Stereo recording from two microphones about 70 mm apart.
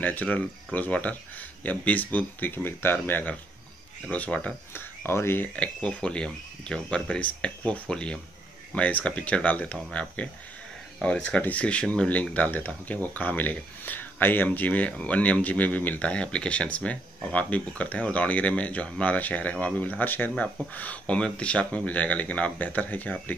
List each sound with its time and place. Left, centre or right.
0.0 s speech: left
4.7 s speech: left
5.6 s speech: centre